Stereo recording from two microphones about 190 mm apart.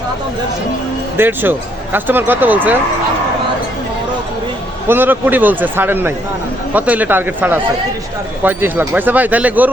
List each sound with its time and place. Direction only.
1.1 s speech: 10° right (ahead or behind)
4.9 s speech: 10° right (ahead or behind)